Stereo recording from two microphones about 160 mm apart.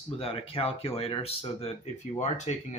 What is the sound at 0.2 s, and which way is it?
Speech, 35° left (ahead or behind).